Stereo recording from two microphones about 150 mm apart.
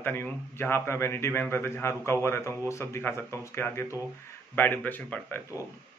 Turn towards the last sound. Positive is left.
turn(degrees=10)  # may be behind; listen again after turning